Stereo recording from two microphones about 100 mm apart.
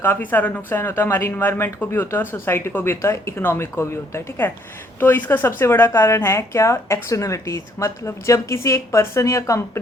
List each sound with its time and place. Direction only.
0.0 s speech: 20° left (ahead or behind)